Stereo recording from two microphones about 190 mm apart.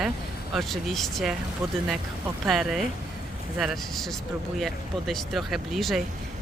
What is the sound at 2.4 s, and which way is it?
Speech, centre (ahead or behind).